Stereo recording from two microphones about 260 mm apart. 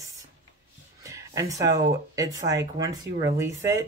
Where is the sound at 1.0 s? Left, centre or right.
Centre.